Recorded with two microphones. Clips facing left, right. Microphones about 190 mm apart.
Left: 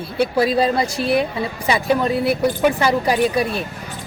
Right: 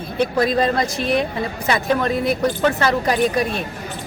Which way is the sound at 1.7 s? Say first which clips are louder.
Left 1 dB; 10° left (ahead or behind).